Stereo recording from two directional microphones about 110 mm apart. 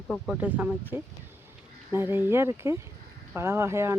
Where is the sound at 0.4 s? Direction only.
15° right (ahead or behind).